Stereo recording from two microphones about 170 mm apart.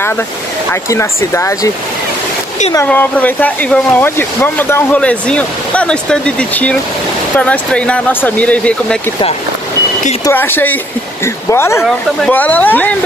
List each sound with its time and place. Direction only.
0.8 s speech: 15° left (ahead or behind)
2.7 s speech: 15° left (ahead or behind)
10.2 s speech: 10° left (ahead or behind)